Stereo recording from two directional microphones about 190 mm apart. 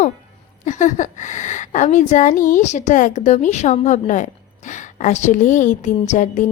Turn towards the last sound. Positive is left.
turn(degrees=40)  # may be behind; listen again after turning